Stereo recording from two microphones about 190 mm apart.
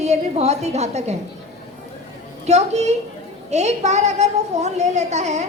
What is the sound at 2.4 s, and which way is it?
Speech, 35° right (ahead or behind).